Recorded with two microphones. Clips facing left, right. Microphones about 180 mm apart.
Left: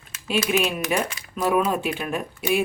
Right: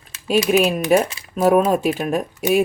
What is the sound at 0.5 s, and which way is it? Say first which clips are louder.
Speech: right 9 dB; 40° right (ahead or behind).